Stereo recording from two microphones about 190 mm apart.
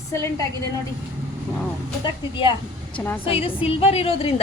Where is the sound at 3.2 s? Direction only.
30° left (ahead or behind).